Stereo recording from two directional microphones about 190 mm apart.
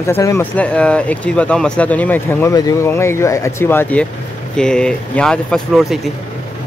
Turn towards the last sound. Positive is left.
turn(degrees=0)  # may be behind; listen again after turning